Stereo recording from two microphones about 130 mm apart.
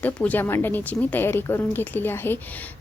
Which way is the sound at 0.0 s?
10° left (ahead or behind).